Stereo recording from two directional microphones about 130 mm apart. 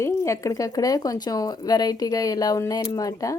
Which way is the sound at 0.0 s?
25° left (ahead or behind).